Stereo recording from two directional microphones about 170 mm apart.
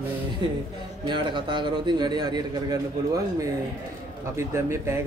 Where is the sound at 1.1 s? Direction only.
30° right (ahead or behind).